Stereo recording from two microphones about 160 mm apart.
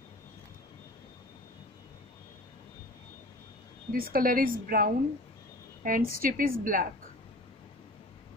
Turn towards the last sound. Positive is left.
turn(degrees=-60)  # may be behind; listen again after turning